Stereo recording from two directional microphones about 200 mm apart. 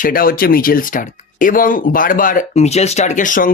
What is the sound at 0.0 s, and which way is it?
Speech, 45° left (ahead or behind).